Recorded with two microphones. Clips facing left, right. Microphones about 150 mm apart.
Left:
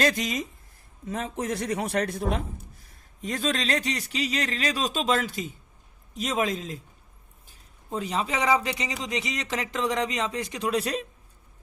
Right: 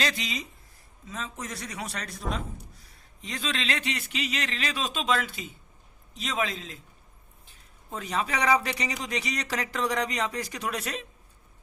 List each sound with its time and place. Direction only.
0.0 s a man's voice: 45° left (ahead or behind)
1.0 s a man's voice: 55° left (ahead or behind)
7.9 s speech: 30° left (ahead or behind)